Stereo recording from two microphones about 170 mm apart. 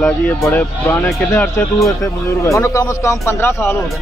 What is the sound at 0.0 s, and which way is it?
Speech, 10° left (ahead or behind).